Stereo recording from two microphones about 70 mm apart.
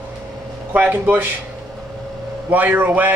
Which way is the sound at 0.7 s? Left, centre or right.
Right.